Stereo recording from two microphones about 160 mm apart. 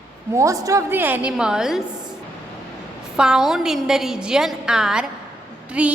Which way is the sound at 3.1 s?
5° right (ahead or behind).